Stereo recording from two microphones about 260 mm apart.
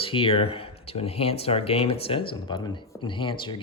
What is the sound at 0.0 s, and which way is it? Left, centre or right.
Speech, left.